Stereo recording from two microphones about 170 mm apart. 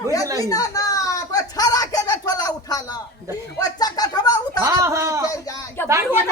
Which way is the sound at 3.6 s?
20° left (ahead or behind).